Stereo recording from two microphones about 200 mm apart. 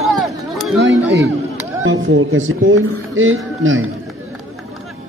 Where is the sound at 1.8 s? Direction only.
80° right.